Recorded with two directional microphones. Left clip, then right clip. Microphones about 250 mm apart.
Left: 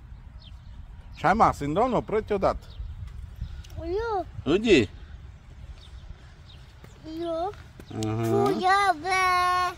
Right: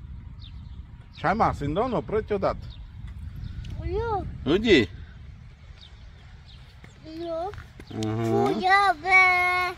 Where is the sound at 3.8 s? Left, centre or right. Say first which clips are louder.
Even; centre.